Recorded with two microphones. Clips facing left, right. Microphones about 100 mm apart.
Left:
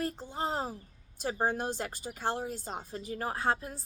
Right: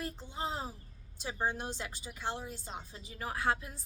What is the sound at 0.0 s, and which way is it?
A woman's voice, 45° left (ahead or behind).